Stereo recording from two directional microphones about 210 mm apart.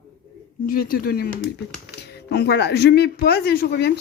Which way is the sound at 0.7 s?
45° left (ahead or behind).